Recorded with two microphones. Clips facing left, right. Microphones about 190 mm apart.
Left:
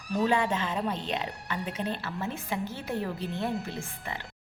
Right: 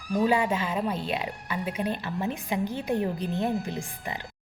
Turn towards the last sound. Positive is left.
turn(degrees=-15)  # may be behind; listen again after turning